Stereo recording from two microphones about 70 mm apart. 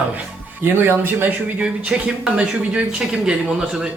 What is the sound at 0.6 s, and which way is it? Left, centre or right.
Speech, right.